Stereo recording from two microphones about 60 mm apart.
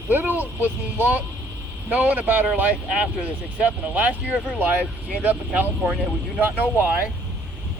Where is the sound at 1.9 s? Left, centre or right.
Right.